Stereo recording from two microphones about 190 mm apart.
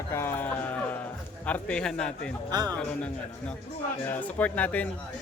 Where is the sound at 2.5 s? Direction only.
20° right (ahead or behind).